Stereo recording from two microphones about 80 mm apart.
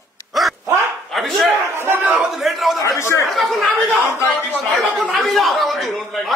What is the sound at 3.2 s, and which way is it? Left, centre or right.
Speech, centre.